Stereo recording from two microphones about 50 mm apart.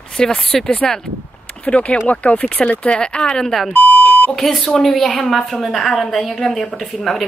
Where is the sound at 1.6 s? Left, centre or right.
Left.